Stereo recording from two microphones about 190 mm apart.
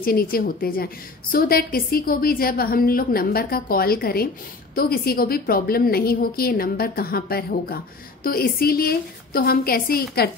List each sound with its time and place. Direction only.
0.0 s a woman's voice: 50° left (ahead or behind)